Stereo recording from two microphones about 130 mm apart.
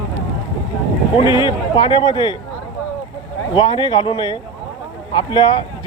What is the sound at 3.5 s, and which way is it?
Speech, 40° left (ahead or behind).